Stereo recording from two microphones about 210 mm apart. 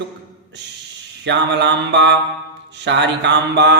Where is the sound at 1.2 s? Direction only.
55° right (ahead or behind).